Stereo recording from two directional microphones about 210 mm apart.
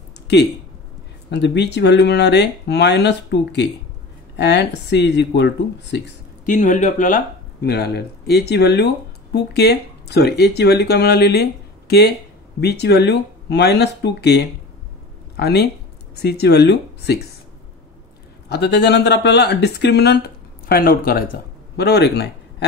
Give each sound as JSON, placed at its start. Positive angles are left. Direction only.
{"t": 0.3, "sound": "speech", "side_deg": 55}
{"t": 6.4, "sound": "speech", "side_deg": 35}
{"t": 12.5, "sound": "speech", "side_deg": 50}
{"t": 18.5, "sound": "speech", "side_deg": 50}